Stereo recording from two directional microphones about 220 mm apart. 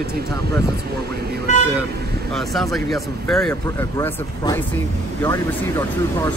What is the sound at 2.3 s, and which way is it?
Speech, centre (ahead or behind).